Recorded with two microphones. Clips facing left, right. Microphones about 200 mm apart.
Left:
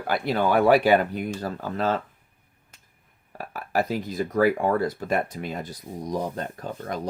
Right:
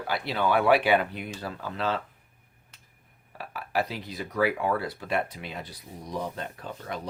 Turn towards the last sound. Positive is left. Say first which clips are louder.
# left 5 dB
turn(degrees=45)  # may be behind; listen again after turning